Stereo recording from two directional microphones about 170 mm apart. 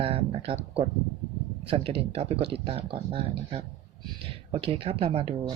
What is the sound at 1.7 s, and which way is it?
Speech, 35° right (ahead or behind).